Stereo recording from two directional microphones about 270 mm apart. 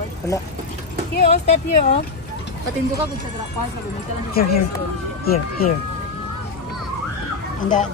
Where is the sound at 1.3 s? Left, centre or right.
Left.